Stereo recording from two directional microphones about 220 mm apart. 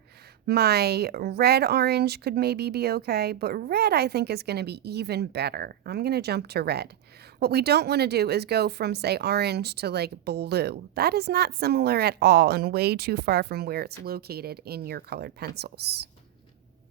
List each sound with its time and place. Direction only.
0.4 s speech: 45° right (ahead or behind)